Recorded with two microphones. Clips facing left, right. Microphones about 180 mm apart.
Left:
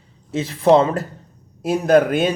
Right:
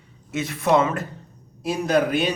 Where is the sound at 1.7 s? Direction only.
50° left (ahead or behind).